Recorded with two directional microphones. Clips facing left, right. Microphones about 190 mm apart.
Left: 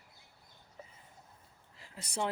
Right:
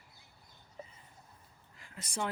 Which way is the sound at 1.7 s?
30° left (ahead or behind).